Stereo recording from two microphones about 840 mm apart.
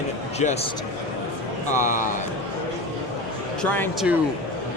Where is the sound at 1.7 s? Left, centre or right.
Centre.